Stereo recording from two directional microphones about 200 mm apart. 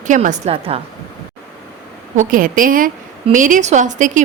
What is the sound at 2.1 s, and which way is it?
A woman's voice, 45° right (ahead or behind).